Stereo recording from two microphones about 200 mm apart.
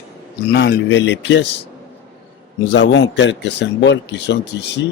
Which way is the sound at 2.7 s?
65° left (ahead or behind).